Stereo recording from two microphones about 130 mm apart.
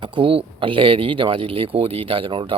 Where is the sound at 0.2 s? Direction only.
45° right (ahead or behind).